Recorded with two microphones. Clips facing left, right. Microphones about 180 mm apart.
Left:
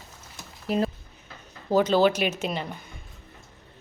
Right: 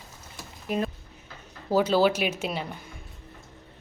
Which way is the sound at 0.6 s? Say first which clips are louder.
Left 3 dB; 30° left (ahead or behind).